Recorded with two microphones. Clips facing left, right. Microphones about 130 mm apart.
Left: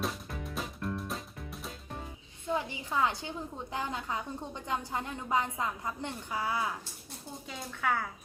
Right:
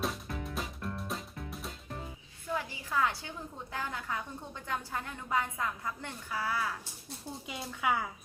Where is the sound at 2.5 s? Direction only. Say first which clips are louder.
Left 2 dB; 20° left (ahead or behind).